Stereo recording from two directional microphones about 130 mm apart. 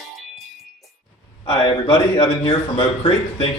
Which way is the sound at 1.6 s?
35° left (ahead or behind).